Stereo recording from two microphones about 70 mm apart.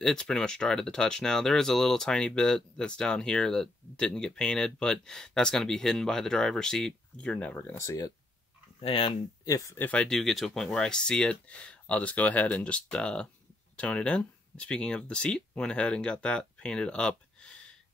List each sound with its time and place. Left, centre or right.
0.0 s speech: centre
7.7 s speech: left
9.4 s speech: left
9.8 s speech: left
10.0 s speech: centre